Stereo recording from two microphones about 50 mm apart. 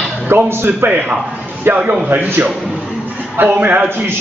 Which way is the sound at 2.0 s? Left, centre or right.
Right.